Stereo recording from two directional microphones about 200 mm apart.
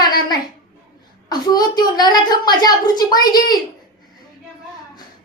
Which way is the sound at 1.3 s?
20° left (ahead or behind).